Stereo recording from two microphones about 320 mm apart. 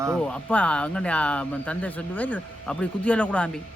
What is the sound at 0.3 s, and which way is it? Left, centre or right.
Speech, centre.